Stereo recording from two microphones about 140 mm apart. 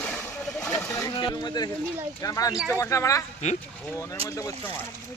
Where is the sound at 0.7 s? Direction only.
20° left (ahead or behind).